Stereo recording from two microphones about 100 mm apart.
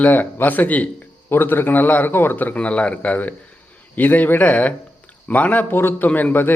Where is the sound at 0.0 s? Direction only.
20° left (ahead or behind).